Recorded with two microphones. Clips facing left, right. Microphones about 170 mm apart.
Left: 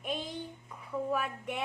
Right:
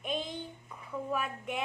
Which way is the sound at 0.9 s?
Centre (ahead or behind).